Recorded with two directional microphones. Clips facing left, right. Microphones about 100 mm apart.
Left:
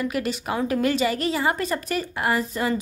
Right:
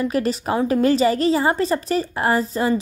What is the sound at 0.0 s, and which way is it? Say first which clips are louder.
Speech: right 5 dB; 35° right (ahead or behind).